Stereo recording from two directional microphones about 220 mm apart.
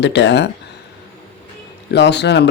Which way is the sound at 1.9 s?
50° left (ahead or behind).